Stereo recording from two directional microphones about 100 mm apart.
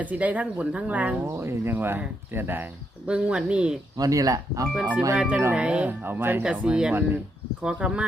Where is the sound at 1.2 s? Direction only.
25° right (ahead or behind).